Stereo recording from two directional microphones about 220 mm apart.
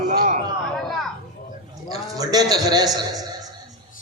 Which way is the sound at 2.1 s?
15° right (ahead or behind).